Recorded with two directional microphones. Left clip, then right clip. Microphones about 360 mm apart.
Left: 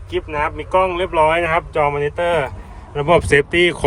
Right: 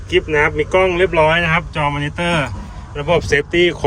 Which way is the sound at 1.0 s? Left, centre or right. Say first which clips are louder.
Right 2 dB; centre.